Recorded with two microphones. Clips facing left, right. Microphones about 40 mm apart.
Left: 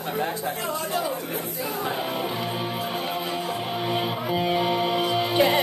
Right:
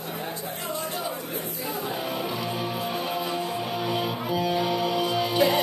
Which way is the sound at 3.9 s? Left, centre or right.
Left.